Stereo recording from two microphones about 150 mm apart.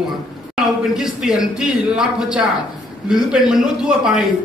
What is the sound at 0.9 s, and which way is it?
A man's voice, centre (ahead or behind).